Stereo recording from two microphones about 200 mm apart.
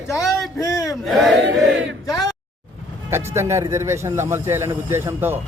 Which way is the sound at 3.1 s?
15° right (ahead or behind).